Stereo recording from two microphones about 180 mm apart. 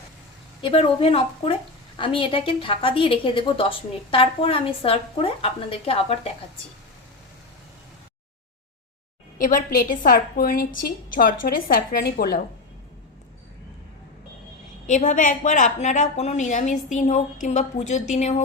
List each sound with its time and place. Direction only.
0.6 s a woman's voice: 30° left (ahead or behind)
9.4 s a woman's voice: 50° left (ahead or behind)
14.8 s a woman's voice: 45° left (ahead or behind)